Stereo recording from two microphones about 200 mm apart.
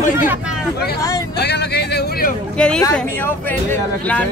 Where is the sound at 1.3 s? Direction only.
55° left (ahead or behind).